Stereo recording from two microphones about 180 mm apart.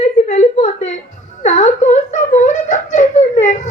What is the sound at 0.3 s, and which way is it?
Whimper, 40° left (ahead or behind).